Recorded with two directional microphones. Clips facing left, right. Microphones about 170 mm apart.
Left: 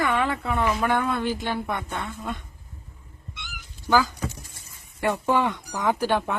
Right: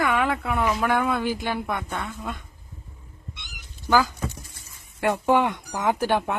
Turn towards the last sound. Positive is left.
turn(degrees=-15)  # may be behind; listen again after turning